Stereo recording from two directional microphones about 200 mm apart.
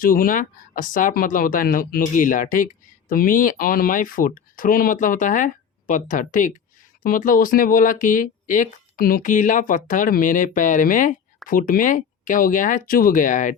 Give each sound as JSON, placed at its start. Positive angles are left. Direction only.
{"t": 0.0, "sound": "speech", "side_deg": 45}